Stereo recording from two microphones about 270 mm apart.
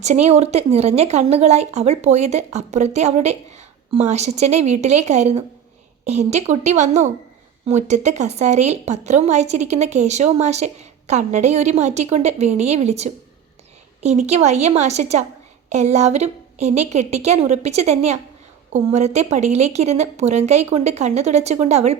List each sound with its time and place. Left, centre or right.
0.0 s speech: right